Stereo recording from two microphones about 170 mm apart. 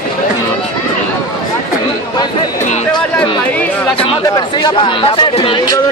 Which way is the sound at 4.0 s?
30° left (ahead or behind).